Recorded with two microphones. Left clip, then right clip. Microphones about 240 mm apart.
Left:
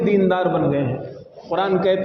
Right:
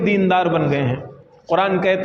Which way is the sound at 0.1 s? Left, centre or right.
Right.